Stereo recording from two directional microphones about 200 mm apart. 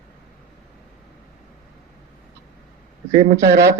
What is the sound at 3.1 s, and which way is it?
Speech, 35° right (ahead or behind).